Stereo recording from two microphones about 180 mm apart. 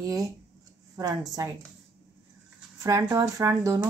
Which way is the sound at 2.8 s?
20° right (ahead or behind).